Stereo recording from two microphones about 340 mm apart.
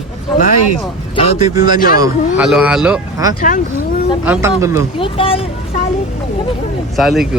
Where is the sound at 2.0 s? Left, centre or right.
Centre.